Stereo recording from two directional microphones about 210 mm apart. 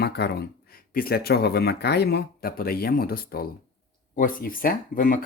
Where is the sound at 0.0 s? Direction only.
50° left (ahead or behind).